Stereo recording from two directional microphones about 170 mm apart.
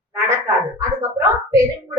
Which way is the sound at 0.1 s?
15° right (ahead or behind).